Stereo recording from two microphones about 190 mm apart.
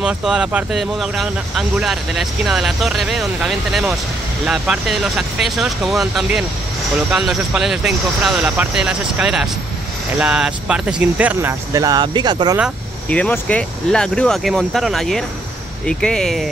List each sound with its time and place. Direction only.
0.0 s speech: 5° right (ahead or behind); by 12.5 s 25° right (ahead or behind)
13.1 s speech: 5° left (ahead or behind)